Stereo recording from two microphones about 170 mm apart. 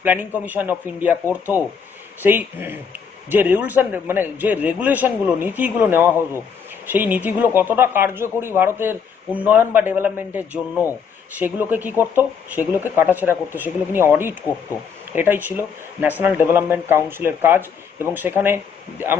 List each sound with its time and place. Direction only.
0.0 s speech: 10° right (ahead or behind)